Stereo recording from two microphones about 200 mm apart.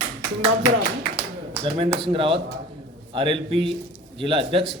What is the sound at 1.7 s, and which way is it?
A man's voice, 25° right (ahead or behind).